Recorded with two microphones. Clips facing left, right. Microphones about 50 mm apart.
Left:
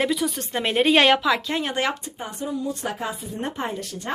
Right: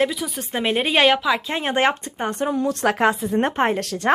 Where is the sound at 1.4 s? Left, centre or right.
Right.